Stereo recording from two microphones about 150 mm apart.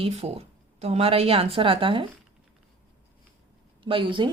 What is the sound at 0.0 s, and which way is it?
A woman's voice, 40° right (ahead or behind).